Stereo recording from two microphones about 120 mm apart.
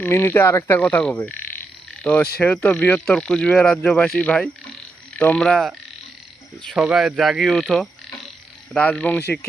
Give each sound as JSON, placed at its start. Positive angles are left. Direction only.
{"t": 0.0, "sound": "speech", "side_deg": 20}
{"t": 6.7, "sound": "speech", "side_deg": -5}